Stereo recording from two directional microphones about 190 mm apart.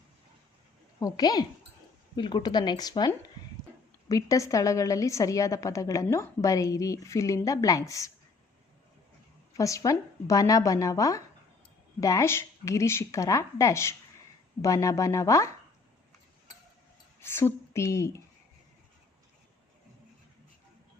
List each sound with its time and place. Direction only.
0.9 s a woman's voice: 20° left (ahead or behind)
9.6 s a woman's voice: 15° left (ahead or behind)
17.2 s a woman's voice: 10° left (ahead or behind)